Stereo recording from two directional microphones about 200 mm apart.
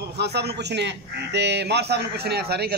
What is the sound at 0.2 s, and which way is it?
A man's voice, 55° right (ahead or behind).